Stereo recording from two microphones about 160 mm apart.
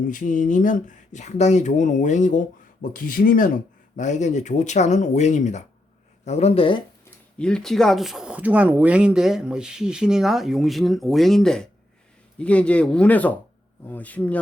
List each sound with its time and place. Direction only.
0.1 s speech: 55° left (ahead or behind)
3.9 s speech: 50° left (ahead or behind); by 6.8 s 35° left (ahead or behind)
7.0 s speech: 5° left (ahead or behind)